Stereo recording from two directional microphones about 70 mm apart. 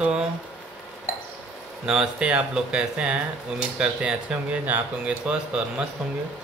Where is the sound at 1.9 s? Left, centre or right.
Centre.